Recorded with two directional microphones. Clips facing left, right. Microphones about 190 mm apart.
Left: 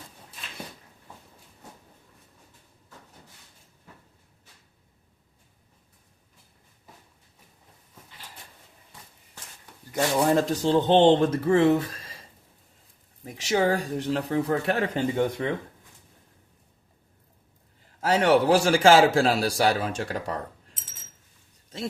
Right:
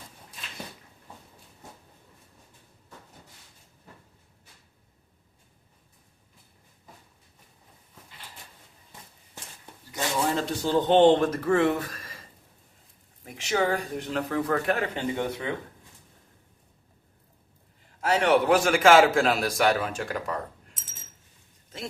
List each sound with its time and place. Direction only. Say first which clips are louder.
9.9 s speech: left 5 dB; 45° left (ahead or behind); by 12.1 s 25° left (ahead or behind)
13.2 s a man's voice: left 3 dB; 40° left (ahead or behind)
18.0 s a man's voice: left 2 dB; 35° left (ahead or behind)